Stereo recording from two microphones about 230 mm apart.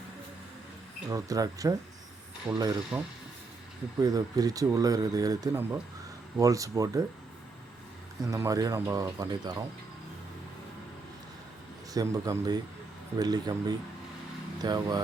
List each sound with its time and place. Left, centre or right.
1.1 s speech: centre
8.2 s speech: centre
11.9 s speech: centre